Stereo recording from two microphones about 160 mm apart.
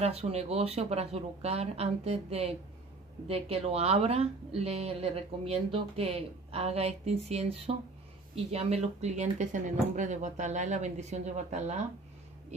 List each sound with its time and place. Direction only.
0.0 s speech: 40° right (ahead or behind)